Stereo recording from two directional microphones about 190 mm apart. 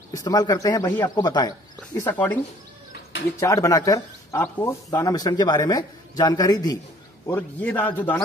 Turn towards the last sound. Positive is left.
turn(degrees=10)  # may be behind; listen again after turning